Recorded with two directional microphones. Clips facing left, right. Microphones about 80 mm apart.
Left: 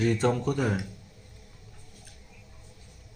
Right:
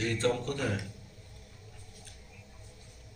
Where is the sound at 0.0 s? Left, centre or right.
Centre.